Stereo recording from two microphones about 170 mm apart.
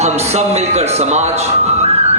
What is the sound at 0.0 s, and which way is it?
A man's voice, 40° right (ahead or behind).